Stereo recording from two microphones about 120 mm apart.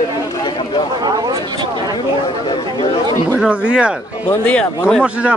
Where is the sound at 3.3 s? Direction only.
10° right (ahead or behind).